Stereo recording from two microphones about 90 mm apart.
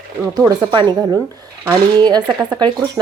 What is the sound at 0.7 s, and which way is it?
Speech, 55° right (ahead or behind).